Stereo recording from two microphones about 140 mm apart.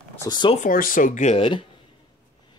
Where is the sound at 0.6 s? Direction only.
80° left; by 1.3 s 65° left (ahead or behind).